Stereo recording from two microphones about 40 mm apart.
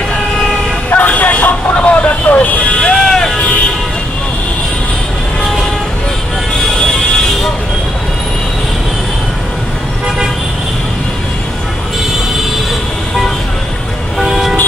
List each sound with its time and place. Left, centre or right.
0.8 s vehicle: left
2.9 s music: centre
14.2 s vehicle: centre